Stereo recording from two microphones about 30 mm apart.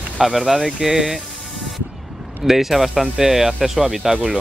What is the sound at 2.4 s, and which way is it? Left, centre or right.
Speech, centre.